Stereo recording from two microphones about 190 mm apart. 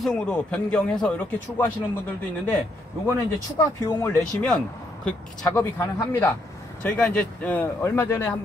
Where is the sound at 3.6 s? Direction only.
15° left (ahead or behind).